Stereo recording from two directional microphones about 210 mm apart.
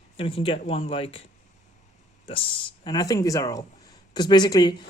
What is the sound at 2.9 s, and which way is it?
Speech, 15° left (ahead or behind).